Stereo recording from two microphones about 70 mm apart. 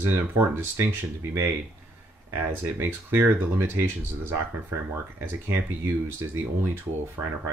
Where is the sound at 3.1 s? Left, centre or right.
Right.